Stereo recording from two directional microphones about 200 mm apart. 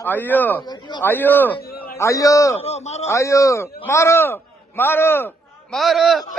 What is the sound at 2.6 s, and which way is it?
Speech, 30° left (ahead or behind).